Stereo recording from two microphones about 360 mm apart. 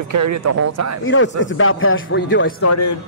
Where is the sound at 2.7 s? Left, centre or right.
Left.